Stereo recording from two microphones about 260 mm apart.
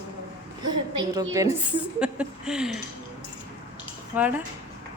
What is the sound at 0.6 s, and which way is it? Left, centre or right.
A woman's voice, centre.